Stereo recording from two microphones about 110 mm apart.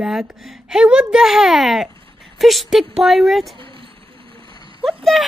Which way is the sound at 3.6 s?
55° right (ahead or behind).